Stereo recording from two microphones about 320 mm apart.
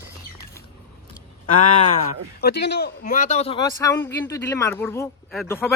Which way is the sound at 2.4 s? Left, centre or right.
Left.